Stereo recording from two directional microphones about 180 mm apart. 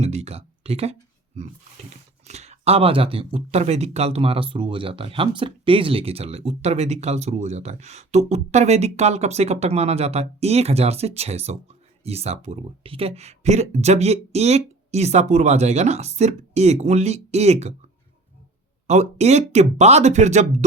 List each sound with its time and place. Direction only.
0.0 s speech: 35° right (ahead or behind)
2.2 s speech: 40° right (ahead or behind)
18.9 s speech: 40° right (ahead or behind)